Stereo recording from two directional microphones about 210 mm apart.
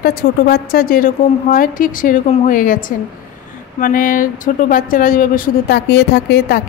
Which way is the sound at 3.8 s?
40° left (ahead or behind).